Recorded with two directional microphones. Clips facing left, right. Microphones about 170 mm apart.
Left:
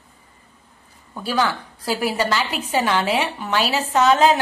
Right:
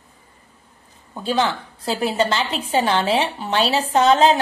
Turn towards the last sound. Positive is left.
turn(degrees=-30)  # may be behind; listen again after turning